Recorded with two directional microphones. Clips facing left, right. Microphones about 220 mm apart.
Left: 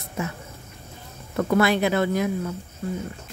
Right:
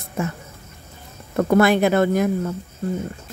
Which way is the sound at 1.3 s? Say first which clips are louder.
Right 4 dB; 50° right (ahead or behind).